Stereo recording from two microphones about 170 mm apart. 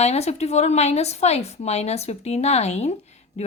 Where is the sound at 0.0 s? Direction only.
40° left (ahead or behind).